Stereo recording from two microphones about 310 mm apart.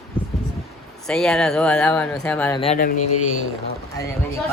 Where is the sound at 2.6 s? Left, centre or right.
Left.